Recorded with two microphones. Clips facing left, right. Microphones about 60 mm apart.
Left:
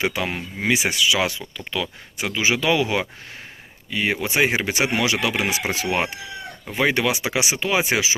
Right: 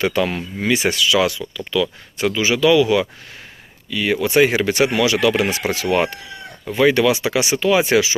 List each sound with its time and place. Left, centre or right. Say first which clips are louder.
0.0 s speech: right 5 dB; centre
1.3 s speech: right 6 dB; left